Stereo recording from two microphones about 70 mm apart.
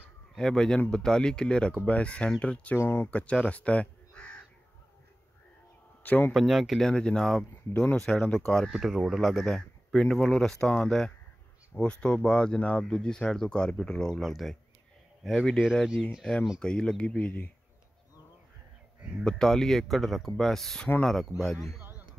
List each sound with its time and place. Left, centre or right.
0.4 s speech: centre
2.8 s speech: left
3.1 s speech: centre
6.0 s speech: left
6.3 s speech: centre
8.7 s speech: centre; by 17.5 s left
19.2 s speech: centre